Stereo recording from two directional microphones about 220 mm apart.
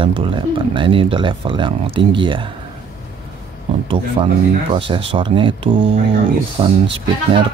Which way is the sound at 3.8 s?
25° right (ahead or behind).